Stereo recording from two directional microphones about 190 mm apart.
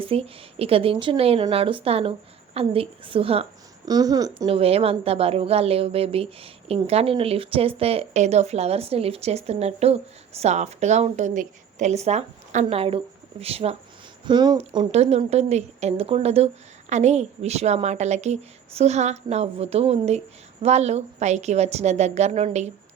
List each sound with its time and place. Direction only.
0.0 s a woman's voice: 30° right (ahead or behind)
4.4 s a woman's voice: 30° right (ahead or behind)